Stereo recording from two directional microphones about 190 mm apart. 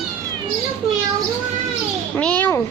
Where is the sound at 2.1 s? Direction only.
10° left (ahead or behind).